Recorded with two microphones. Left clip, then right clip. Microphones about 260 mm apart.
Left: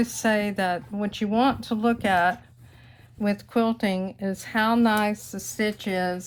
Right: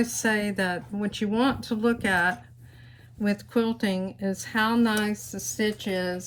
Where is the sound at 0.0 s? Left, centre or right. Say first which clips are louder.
Left 2 dB; left.